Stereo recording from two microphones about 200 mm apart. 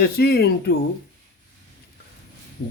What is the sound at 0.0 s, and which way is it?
Speech, 50° left (ahead or behind).